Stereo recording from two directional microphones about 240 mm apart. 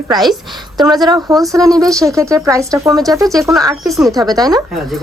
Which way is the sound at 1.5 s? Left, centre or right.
Centre.